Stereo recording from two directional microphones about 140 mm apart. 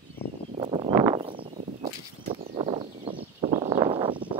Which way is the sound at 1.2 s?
45° right (ahead or behind).